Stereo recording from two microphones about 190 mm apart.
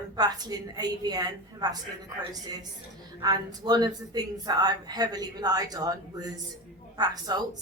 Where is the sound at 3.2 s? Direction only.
20° right (ahead or behind).